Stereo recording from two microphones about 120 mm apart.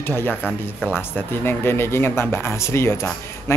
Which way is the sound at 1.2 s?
20° left (ahead or behind).